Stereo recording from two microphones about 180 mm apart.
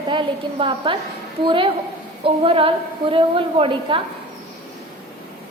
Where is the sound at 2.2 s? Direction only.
30° right (ahead or behind).